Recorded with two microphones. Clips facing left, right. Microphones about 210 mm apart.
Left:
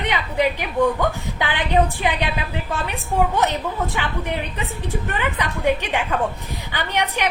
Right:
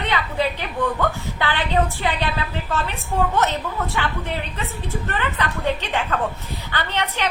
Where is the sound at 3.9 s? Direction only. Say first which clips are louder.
Left 1 dB; 15° left (ahead or behind).